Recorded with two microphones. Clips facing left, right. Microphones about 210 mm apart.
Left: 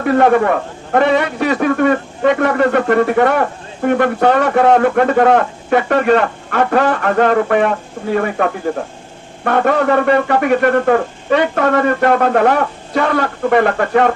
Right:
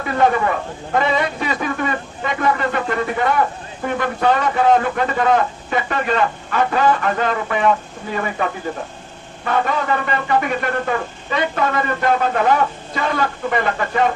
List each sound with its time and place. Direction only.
0.0 s a man's voice: 60° left (ahead or behind)